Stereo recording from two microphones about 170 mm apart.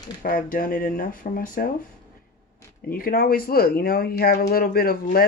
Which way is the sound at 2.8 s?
60° left (ahead or behind).